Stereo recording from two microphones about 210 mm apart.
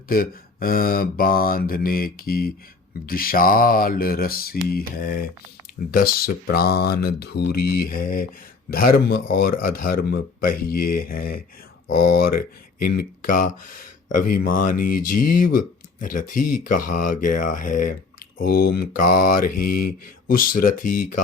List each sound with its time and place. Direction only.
0.1 s speech: 45° left (ahead or behind)